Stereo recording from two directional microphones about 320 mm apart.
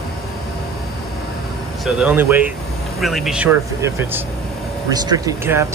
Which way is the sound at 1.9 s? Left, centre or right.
Centre.